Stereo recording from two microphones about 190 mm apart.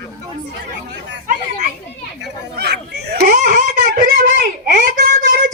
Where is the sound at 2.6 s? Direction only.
55° right (ahead or behind).